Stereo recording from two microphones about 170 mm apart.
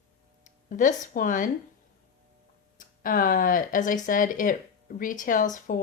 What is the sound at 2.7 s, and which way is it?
Speech, 55° left (ahead or behind).